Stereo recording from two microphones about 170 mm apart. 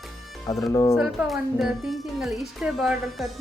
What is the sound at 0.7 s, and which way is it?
Speech, 20° left (ahead or behind).